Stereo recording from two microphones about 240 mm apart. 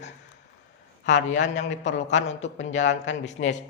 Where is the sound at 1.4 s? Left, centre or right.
Left.